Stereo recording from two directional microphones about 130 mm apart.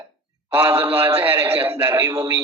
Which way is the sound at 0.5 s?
15° right (ahead or behind).